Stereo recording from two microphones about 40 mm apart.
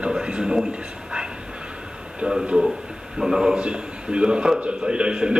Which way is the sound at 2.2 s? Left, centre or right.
Right.